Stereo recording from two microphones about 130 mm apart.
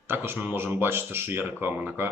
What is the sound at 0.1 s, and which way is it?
Speech, 15° right (ahead or behind).